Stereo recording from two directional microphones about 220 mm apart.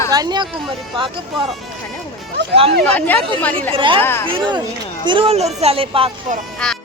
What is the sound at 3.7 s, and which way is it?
Speech, 20° right (ahead or behind).